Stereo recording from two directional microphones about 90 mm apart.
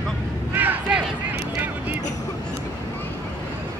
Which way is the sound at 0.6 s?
20° right (ahead or behind).